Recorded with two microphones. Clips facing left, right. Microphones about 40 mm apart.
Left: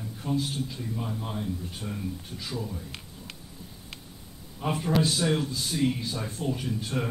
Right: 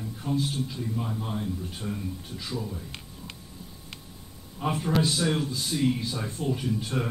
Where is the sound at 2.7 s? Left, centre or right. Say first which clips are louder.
Even; centre.